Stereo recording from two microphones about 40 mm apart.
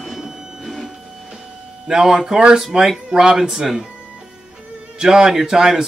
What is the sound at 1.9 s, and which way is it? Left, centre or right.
Speech, centre.